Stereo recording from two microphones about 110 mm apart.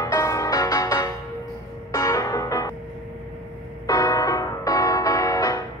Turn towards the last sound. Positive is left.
turn(degrees=30)  # may be behind; listen again after turning